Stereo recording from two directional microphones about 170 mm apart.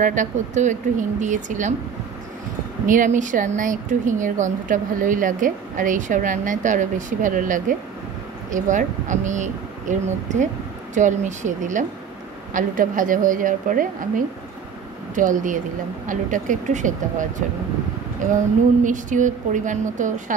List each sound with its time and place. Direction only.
0.0 s speech: 45° right (ahead or behind)
2.9 s speech: 50° right (ahead or behind)
18.9 s speech: 50° right (ahead or behind)